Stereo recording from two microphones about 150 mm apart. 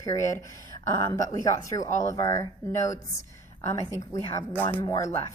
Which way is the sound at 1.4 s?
20° left (ahead or behind).